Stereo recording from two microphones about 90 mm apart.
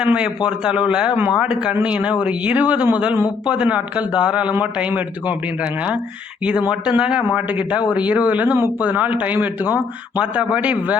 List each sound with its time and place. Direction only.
0.0 s speech: 10° right (ahead or behind)
6.4 s speech: 15° right (ahead or behind)